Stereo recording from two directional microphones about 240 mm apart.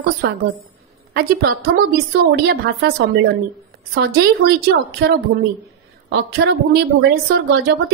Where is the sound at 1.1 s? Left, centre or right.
Right.